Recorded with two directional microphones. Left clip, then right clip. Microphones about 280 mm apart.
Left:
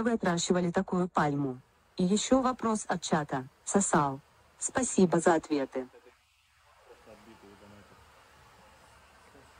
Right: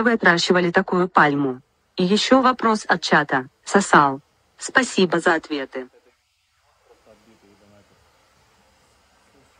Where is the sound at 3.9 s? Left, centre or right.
Right.